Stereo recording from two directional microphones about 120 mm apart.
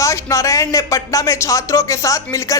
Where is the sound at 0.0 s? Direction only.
25° left (ahead or behind).